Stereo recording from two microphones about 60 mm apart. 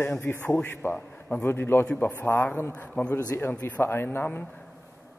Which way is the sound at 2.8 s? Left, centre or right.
Left.